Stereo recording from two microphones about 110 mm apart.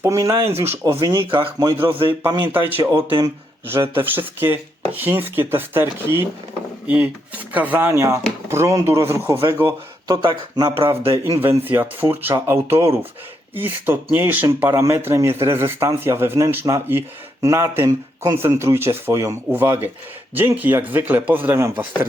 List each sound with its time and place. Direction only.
0.0 s speech: 25° right (ahead or behind)
1.3 s speech: 50° right (ahead or behind)
2.0 s speech: 30° right (ahead or behind)
2.4 s speech: 15° right (ahead or behind)
10.1 s speech: 45° right (ahead or behind)
11.1 s speech: 20° right (ahead or behind)